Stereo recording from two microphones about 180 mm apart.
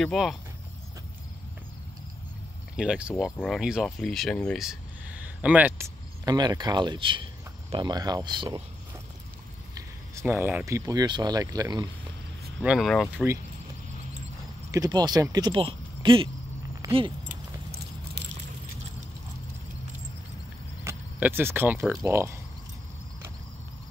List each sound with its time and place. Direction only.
0.0 s speech: centre (ahead or behind)
2.7 s speech: 5° right (ahead or behind)
6.2 s speech: 20° right (ahead or behind)
9.8 s speech: 15° right (ahead or behind)
12.6 s speech: centre (ahead or behind)
14.7 s speech: 20° right (ahead or behind)
16.8 s a sound: 20° right (ahead or behind)
17.6 s a sound: 65° right (ahead or behind)
20.8 s speech: 10° right (ahead or behind)